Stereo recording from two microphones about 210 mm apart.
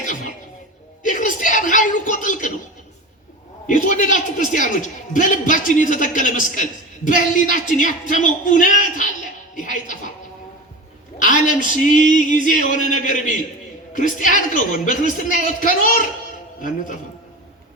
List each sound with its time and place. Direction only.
0.0 s music: 40° left (ahead or behind)
1.0 s a sound: 40° left (ahead or behind)
3.7 s a man's voice: 35° left (ahead or behind)
11.2 s a man's voice: 40° left (ahead or behind)